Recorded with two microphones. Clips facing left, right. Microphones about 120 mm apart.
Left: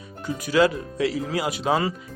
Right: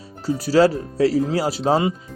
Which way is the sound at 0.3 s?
35° right (ahead or behind).